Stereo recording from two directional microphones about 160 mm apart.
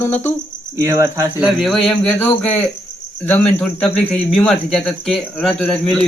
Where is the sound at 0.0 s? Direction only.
10° left (ahead or behind).